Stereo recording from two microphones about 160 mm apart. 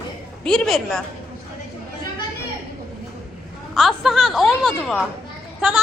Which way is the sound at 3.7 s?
Centre (ahead or behind).